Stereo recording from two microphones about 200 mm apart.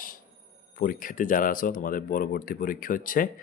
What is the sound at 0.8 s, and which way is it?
Speech, 45° left (ahead or behind).